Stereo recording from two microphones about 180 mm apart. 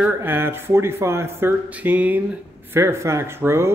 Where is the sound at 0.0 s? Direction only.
10° right (ahead or behind).